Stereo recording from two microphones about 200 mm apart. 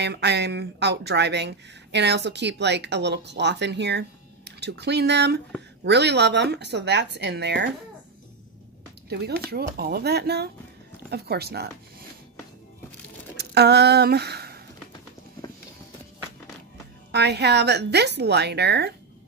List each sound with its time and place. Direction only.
0.0 s speech: 55° right (ahead or behind)
9.1 s speech: 50° right (ahead or behind)
13.4 s speech: 55° right (ahead or behind)
17.1 s speech: 55° right (ahead or behind)